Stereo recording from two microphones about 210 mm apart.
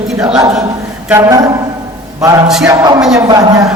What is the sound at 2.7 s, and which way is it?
Speech, 20° right (ahead or behind).